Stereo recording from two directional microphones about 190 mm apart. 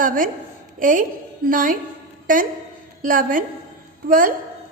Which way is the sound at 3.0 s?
45° right (ahead or behind).